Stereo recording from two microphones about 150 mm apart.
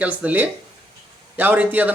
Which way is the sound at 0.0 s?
10° right (ahead or behind).